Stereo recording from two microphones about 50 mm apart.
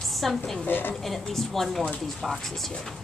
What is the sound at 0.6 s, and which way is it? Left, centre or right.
Speech, left.